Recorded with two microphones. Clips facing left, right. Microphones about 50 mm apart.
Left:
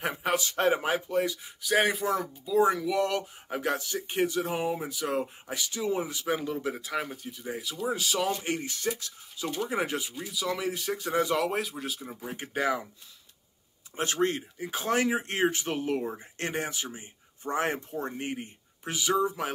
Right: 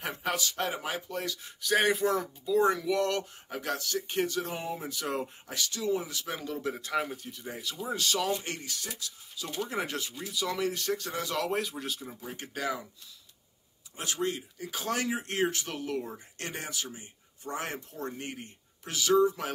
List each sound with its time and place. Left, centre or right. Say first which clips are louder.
0.0 s speech: left 4 dB; centre; by 1.0 s left
1.0 s speech: left 7 dB; centre
3.4 s speech: left 4 dB; left; by 5.3 s centre
5.5 s speech: right 1 dB; centre
6.6 s speech: even; centre
8.9 s speech: left 11 dB; left
9.5 s speech: left 3 dB; centre
11.4 s speech: left 1 dB; centre
12.4 s speech: left 6 dB; left
13.9 s speech: left 5 dB; left
14.6 s speech: left 6 dB; left; by 19.5 s centre